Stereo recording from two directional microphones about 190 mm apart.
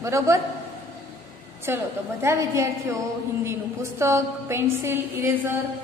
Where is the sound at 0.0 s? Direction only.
15° right (ahead or behind).